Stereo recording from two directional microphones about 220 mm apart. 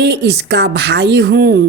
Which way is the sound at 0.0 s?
50° right (ahead or behind).